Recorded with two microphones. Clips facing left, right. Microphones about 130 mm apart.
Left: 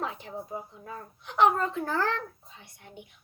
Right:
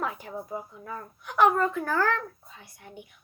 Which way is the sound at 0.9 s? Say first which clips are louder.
Right 3 dB; 25° left (ahead or behind).